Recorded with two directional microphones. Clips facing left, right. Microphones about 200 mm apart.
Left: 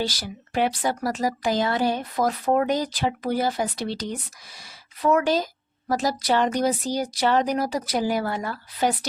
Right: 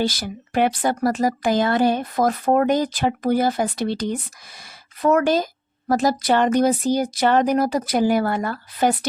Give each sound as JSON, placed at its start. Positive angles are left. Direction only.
{"t": 0.0, "sound": "speech", "side_deg": -55}
{"t": 5.0, "sound": "speech", "side_deg": -50}